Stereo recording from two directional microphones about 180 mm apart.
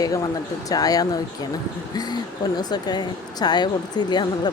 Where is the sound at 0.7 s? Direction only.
20° left (ahead or behind).